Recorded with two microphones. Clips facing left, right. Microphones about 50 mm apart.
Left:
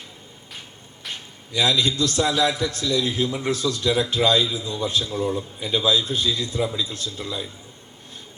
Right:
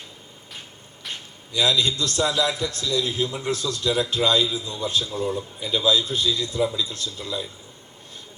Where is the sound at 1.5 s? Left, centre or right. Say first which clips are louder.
Left 1 dB; left.